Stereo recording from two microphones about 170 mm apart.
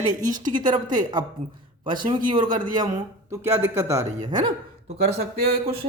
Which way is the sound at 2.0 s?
25° right (ahead or behind).